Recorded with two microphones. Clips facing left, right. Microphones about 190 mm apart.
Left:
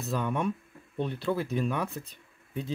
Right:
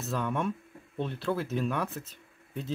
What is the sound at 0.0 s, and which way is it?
Speech, centre (ahead or behind).